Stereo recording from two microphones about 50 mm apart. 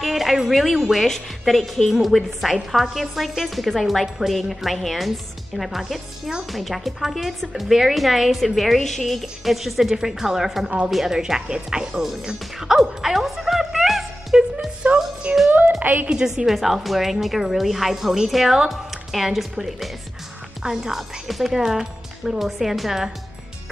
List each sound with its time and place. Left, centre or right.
0.0 s a woman's voice: centre
1.6 s a woman's voice: centre
13.0 s music: centre
15.3 s a woman's voice: right
16.1 s a woman's voice: centre